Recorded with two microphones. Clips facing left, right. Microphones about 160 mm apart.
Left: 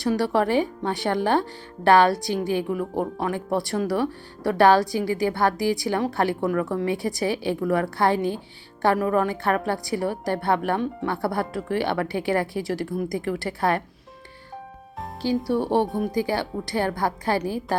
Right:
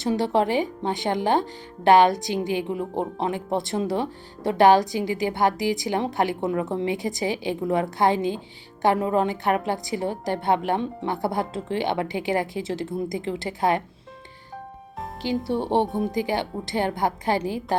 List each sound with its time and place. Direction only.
0.0 s speech: 20° right (ahead or behind)
15.4 s speech: 20° right (ahead or behind)